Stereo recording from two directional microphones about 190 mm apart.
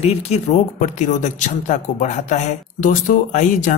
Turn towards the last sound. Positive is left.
turn(degrees=45)  # may be behind; listen again after turning